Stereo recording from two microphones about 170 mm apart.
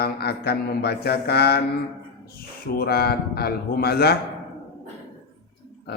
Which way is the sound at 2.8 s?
65° left (ahead or behind).